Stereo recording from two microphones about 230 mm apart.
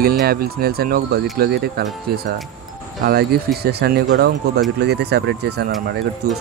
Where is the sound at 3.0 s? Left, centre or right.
Right.